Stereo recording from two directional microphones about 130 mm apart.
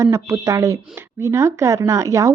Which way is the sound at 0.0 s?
25° right (ahead or behind).